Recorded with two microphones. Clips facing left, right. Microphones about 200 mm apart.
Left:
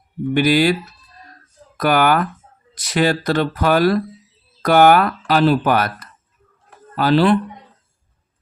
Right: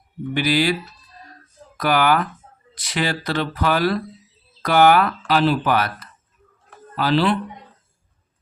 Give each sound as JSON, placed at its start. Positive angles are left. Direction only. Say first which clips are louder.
{"t": 0.3, "sound": "speech", "louder": "left 5 dB", "side_deg": 45}
{"t": 1.8, "sound": "speech", "louder": "left 3 dB", "side_deg": 50}